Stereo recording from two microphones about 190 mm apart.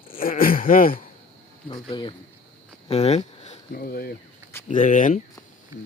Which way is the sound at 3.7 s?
50° left (ahead or behind).